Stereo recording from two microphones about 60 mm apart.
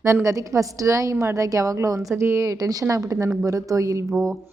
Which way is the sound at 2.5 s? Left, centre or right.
Right.